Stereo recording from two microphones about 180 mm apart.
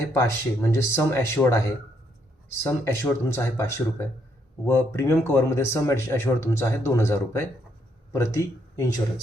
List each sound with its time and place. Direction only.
0.1 s speech: 15° left (ahead or behind)